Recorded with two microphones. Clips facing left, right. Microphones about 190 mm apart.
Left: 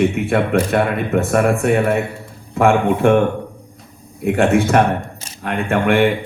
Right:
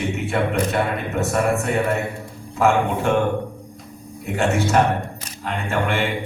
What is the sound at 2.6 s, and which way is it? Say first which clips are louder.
Speech: left 5 dB; 55° left (ahead or behind).